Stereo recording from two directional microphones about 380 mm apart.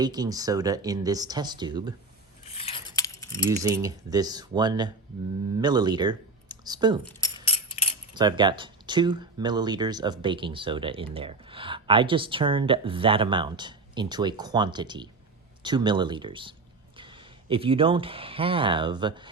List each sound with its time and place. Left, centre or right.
0.0 s speech: centre
2.5 s keys jangling: centre
3.5 s speech: centre
7.4 s a sound: centre
8.1 s speech: centre